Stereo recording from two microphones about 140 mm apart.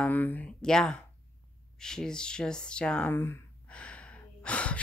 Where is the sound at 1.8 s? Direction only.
5° left (ahead or behind).